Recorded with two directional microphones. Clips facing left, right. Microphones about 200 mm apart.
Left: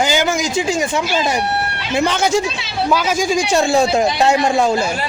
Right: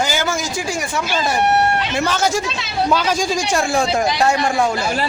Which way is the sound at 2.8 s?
5° left (ahead or behind).